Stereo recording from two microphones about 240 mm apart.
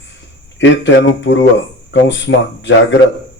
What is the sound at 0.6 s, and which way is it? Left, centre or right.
A man's voice, left.